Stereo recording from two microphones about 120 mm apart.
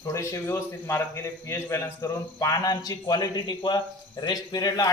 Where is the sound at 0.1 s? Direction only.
25° left (ahead or behind).